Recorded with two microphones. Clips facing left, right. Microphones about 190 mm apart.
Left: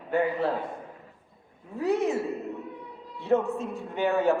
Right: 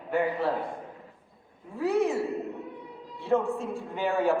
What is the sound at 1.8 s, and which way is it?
Speech, 20° left (ahead or behind).